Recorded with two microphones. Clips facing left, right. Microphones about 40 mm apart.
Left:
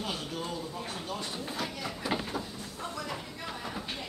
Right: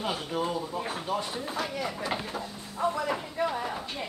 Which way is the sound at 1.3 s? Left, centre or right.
Centre.